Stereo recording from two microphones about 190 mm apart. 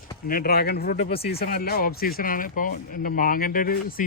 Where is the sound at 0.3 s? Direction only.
50° left (ahead or behind).